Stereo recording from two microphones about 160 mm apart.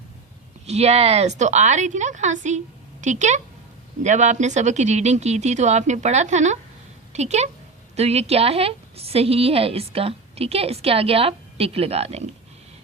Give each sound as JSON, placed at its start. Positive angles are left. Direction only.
{"t": 0.7, "sound": "a woman's voice", "side_deg": -40}